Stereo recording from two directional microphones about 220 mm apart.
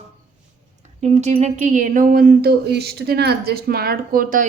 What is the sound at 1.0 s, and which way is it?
A woman's voice, 30° right (ahead or behind).